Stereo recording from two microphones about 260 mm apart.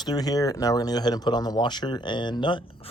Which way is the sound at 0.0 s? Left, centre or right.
Centre.